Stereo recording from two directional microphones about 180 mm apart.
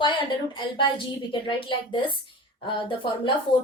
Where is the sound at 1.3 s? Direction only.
30° left (ahead or behind).